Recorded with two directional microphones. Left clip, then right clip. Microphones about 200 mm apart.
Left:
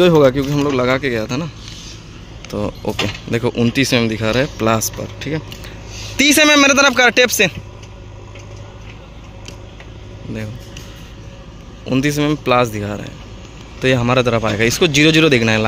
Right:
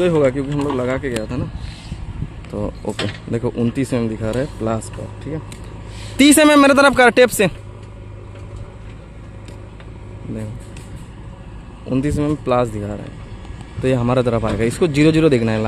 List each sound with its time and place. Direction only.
0.0 s speech: 20° left (ahead or behind)
2.5 s speech: centre (ahead or behind)
6.1 s speech: 15° right (ahead or behind)
11.9 s speech: centre (ahead or behind)